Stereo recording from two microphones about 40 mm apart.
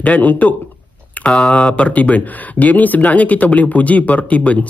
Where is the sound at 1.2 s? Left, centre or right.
Left.